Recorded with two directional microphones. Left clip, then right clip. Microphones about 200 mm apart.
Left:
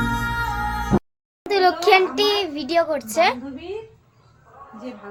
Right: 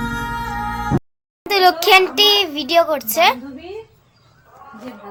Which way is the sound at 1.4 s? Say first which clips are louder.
Right 4 dB; 10° right (ahead or behind).